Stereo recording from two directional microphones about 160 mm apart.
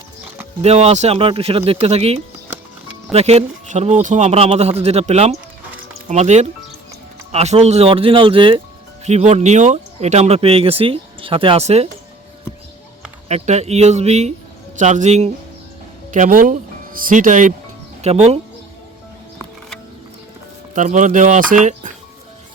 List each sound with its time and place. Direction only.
0.6 s speech: 40° right (ahead or behind)
9.0 s speech: 45° right (ahead or behind)
13.2 s speech: 45° right (ahead or behind)
18.0 s speech: 40° right (ahead or behind)
20.7 s speech: 50° right (ahead or behind)